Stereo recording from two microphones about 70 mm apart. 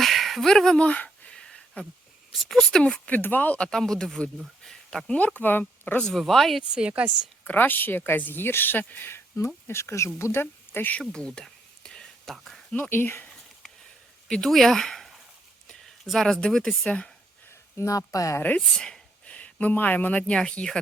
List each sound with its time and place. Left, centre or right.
0.0 s a sound: centre
2.4 s speech: centre
3.1 s speech: left
3.7 s speech: centre
5.1 s speech: left
6.0 s speech: centre
6.6 s speech: centre
7.4 s speech: left
11.1 s a sound: centre
12.7 s speech: left
14.3 s speech: centre
17.5 s speech: left
18.8 s speech: centre